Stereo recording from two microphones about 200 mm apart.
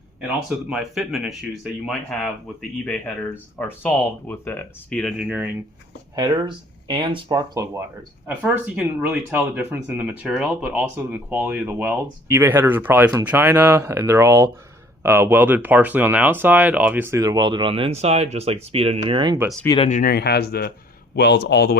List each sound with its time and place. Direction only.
0.7 s speech: centre (ahead or behind)
6.1 s speech: 20° right (ahead or behind)
19.6 s speech: 25° left (ahead or behind)
19.9 s speech: 45° left (ahead or behind)
21.2 s speech: 60° left (ahead or behind)